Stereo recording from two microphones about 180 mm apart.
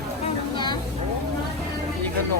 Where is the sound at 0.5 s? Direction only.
25° left (ahead or behind).